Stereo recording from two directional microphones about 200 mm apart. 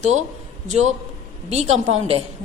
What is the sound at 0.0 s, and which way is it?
A woman's voice, 35° right (ahead or behind).